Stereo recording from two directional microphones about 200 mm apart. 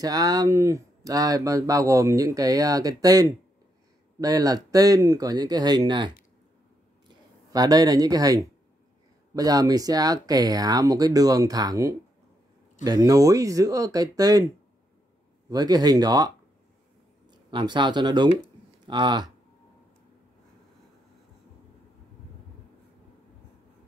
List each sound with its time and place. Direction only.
0.0 s speech: 20° right (ahead or behind)
7.5 s speech: 20° right (ahead or behind)
15.5 s speech: 20° right (ahead or behind)